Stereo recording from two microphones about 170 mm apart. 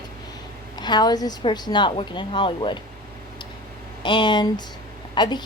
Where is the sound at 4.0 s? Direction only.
25° left (ahead or behind).